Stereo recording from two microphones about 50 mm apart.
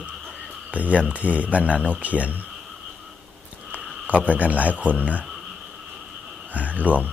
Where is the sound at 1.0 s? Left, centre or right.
Right.